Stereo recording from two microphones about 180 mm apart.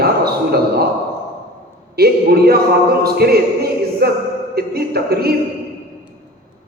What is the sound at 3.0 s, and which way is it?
Music, 60° right (ahead or behind).